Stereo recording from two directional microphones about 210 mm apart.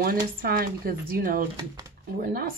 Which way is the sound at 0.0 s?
45° right (ahead or behind).